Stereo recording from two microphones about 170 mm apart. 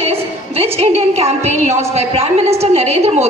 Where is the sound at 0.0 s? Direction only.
35° right (ahead or behind).